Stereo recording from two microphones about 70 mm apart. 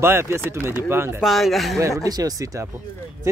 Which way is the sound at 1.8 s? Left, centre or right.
Right.